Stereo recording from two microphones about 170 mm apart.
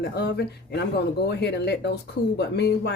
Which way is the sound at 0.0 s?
70° left (ahead or behind).